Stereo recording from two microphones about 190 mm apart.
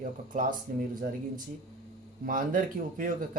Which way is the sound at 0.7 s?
45° right (ahead or behind).